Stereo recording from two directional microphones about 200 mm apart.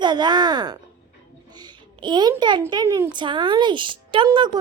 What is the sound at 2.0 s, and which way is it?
Speech, 20° right (ahead or behind).